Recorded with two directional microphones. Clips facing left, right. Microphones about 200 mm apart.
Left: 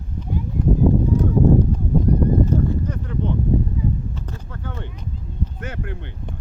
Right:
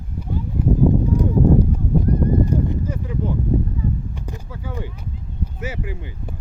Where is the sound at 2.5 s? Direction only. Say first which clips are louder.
Left 1 dB; 10° right (ahead or behind).